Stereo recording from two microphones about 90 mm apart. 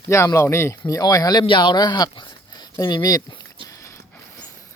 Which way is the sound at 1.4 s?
60° left (ahead or behind).